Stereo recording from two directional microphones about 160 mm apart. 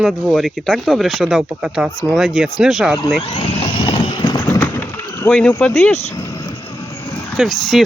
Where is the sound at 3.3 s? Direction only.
35° left (ahead or behind).